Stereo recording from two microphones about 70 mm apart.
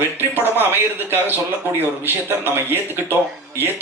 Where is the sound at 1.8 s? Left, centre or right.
Right.